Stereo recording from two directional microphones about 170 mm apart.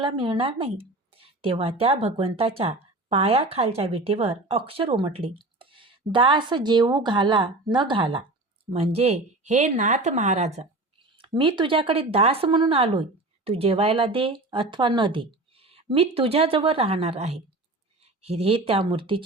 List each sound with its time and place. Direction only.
0.0 s speech: 30° right (ahead or behind)